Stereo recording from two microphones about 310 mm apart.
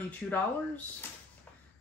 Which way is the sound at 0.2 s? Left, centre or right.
Centre.